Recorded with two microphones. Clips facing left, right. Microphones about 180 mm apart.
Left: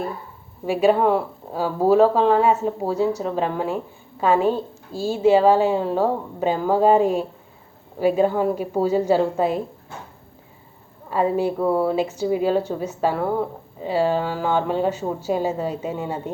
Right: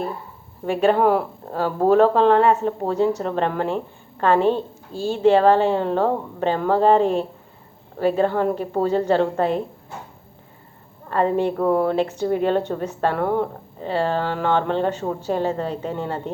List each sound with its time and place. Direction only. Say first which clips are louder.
0.6 s a woman's voice: even; 5° left (ahead or behind)
4.9 s speech: even; 35° left (ahead or behind)
5.1 s a woman's voice: even; 5° left (ahead or behind)
11.1 s a woman's voice: right 1 dB; 10° left (ahead or behind)